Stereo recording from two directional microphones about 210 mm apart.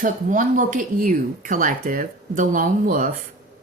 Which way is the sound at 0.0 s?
40° right (ahead or behind).